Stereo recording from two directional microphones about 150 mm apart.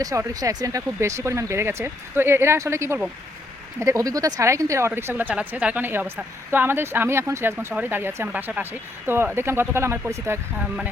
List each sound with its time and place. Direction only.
0.0 s speech: 25° right (ahead or behind)